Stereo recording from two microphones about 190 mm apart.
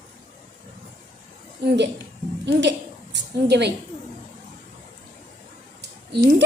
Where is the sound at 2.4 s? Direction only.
65° right (ahead or behind).